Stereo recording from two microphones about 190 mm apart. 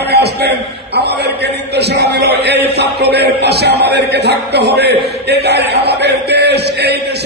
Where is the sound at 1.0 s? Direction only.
60° right (ahead or behind).